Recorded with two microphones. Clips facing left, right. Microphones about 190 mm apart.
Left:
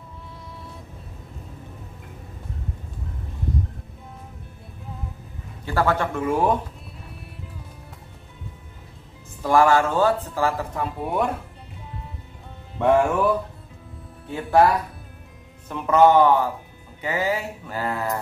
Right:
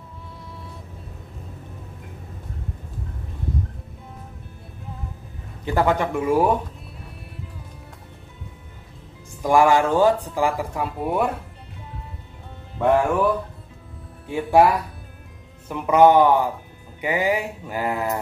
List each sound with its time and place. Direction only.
5.7 s speech: 15° right (ahead or behind)
9.4 s speech: 15° right (ahead or behind)
12.7 s music: centre (ahead or behind)
14.3 s speech: 10° right (ahead or behind)
15.7 s speech: 15° right (ahead or behind)